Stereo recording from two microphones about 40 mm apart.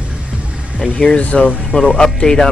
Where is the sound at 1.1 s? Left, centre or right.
Left.